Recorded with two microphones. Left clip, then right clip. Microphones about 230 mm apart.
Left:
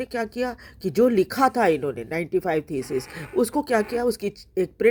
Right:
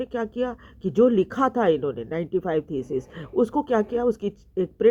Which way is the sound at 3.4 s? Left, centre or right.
Left.